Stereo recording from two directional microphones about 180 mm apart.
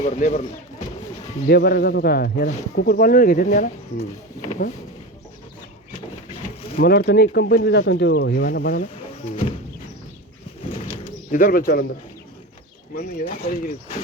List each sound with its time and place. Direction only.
0.0 s speech: 40° left (ahead or behind)
1.5 s speech: 60° left (ahead or behind); by 4.7 s 45° left (ahead or behind)
6.7 s speech: 60° left (ahead or behind)
11.3 s speech: 50° left (ahead or behind)
12.9 s speech: 55° left (ahead or behind)